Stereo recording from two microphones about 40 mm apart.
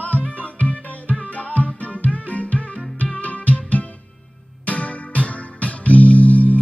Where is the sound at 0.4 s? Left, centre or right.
Left.